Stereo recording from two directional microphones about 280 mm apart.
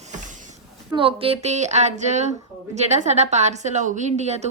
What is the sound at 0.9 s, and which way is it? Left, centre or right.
Speech, centre.